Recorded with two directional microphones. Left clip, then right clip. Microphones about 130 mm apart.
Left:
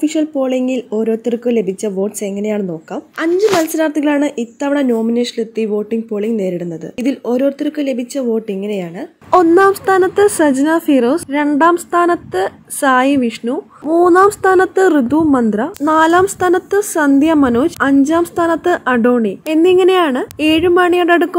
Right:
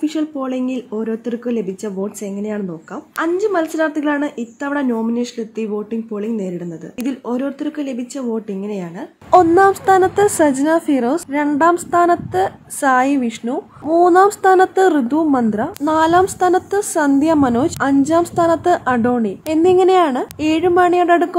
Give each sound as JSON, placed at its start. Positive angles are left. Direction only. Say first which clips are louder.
{"t": 0.0, "sound": "a woman's voice", "louder": "left 5 dB", "side_deg": 20}